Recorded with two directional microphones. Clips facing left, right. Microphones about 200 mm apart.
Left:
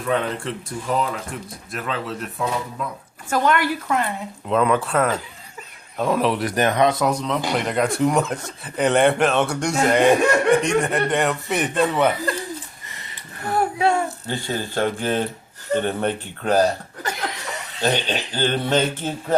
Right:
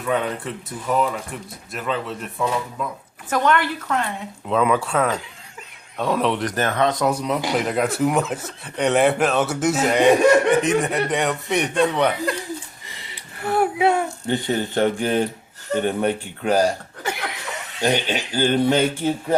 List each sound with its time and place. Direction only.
0.1 s speech: 5° right (ahead or behind); by 7.0 s 15° left (ahead or behind)
7.0 s speech: 10° right (ahead or behind)
13.4 s a sound: 5° right (ahead or behind)
14.3 s speech: 20° right (ahead or behind)